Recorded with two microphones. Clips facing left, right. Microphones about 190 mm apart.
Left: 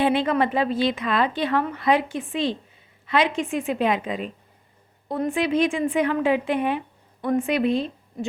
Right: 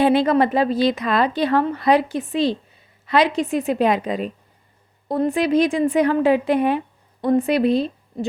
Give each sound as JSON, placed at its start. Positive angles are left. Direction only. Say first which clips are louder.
{"t": 0.0, "sound": "a woman's voice", "louder": "right 5 dB", "side_deg": -40}